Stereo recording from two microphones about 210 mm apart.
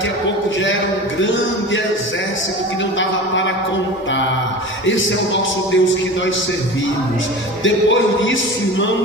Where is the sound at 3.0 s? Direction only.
60° left (ahead or behind).